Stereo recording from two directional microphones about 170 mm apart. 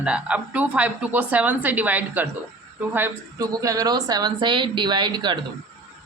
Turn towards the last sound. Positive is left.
turn(degrees=-25)  # may be behind; listen again after turning